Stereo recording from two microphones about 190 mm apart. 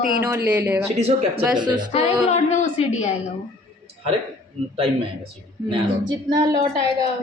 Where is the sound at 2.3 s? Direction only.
40° left (ahead or behind).